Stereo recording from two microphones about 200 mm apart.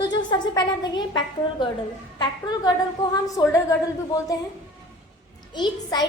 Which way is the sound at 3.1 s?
15° left (ahead or behind).